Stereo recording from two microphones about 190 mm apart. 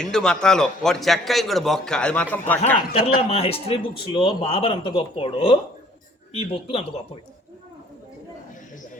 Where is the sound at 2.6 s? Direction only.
35° left (ahead or behind).